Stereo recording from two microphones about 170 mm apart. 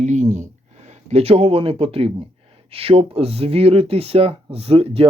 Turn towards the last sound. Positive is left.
turn(degrees=-35)  # may be behind; listen again after turning